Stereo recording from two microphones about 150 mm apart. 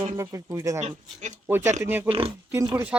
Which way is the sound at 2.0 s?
40° right (ahead or behind).